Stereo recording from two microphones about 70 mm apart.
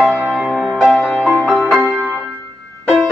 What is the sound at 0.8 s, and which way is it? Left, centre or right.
Music, centre.